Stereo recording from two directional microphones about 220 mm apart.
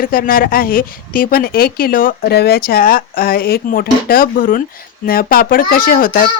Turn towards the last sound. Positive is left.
turn(degrees=40)  # may be behind; listen again after turning